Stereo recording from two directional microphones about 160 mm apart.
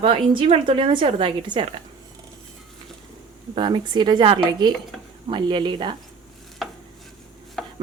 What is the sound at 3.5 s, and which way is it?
Speech, 30° right (ahead or behind).